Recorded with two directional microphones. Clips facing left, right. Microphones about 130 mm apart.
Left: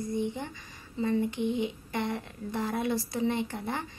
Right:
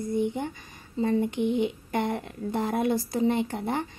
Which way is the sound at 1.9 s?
50° right (ahead or behind).